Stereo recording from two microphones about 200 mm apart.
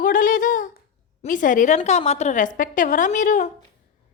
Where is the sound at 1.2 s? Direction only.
40° left (ahead or behind).